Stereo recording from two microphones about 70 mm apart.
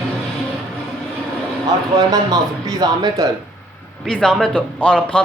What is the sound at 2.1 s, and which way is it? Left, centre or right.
Speech, right.